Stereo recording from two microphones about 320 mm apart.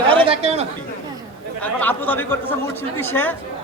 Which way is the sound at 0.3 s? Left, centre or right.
Centre.